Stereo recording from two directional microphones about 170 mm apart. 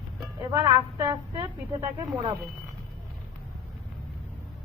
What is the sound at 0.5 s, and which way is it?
A woman's voice, 25° right (ahead or behind).